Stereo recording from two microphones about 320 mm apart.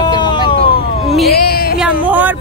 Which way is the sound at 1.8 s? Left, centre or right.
Centre.